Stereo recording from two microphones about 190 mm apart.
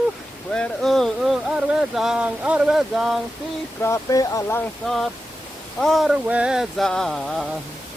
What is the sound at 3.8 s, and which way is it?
Speech, 15° left (ahead or behind).